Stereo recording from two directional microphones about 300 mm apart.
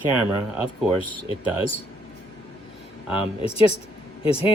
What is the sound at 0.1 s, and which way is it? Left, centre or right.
Speech, centre.